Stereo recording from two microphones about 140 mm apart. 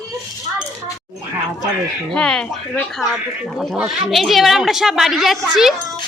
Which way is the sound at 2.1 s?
5° left (ahead or behind).